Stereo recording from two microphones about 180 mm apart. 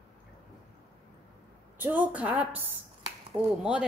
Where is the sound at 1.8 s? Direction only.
10° right (ahead or behind).